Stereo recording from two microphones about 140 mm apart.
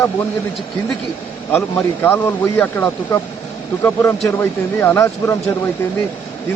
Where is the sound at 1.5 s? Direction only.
15° left (ahead or behind).